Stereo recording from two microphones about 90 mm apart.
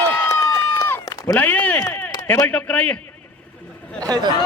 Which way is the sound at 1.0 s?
40° left (ahead or behind).